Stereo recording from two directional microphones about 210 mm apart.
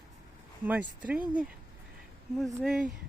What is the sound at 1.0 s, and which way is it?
Speech, 5° right (ahead or behind).